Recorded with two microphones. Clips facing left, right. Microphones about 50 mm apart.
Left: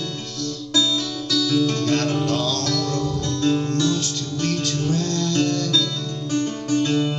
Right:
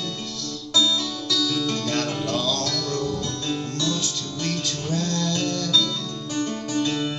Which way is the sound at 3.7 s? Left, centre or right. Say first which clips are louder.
Left 5 dB; left.